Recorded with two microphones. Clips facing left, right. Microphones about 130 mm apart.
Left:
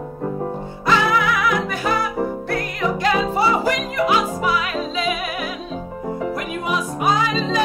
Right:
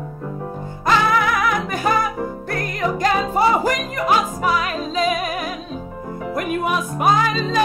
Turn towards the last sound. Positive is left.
turn(degrees=-50)  # may be behind; listen again after turning